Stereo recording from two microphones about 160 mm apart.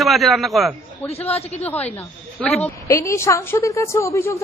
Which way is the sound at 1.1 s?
40° left (ahead or behind).